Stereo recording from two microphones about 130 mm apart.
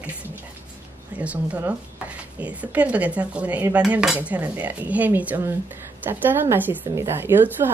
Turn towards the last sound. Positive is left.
turn(degrees=-15)  # may be behind; listen again after turning